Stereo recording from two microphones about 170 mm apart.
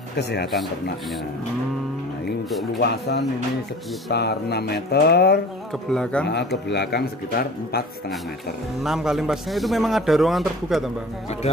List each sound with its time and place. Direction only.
0.2 s speech: 80° left
2.8 s speech: 70° left (ahead or behind)
5.9 s a man's voice: 5° left (ahead or behind)
6.7 s speech: 75° left (ahead or behind)
8.8 s a man's voice: centre (ahead or behind)